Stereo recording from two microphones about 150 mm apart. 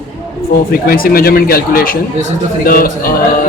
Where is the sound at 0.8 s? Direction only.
80° left.